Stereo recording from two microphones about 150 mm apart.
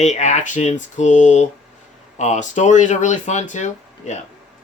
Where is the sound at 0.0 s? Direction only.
50° left (ahead or behind).